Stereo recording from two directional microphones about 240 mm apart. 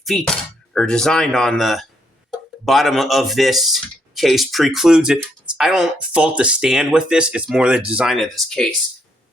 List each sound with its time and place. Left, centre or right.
0.0 s speech: centre